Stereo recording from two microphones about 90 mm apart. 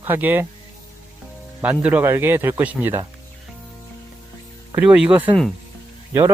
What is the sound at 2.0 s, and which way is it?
Speech, 25° right (ahead or behind).